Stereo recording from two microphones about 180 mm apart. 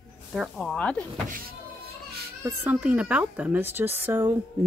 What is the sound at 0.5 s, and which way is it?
Speech, 5° left (ahead or behind).